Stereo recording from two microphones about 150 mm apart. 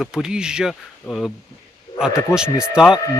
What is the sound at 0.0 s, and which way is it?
Speech, 5° right (ahead or behind).